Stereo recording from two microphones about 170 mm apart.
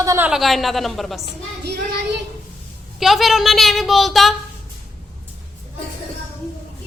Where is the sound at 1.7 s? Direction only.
70° right (ahead or behind).